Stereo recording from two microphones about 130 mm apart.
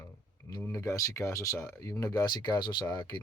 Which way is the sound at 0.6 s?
25° left (ahead or behind).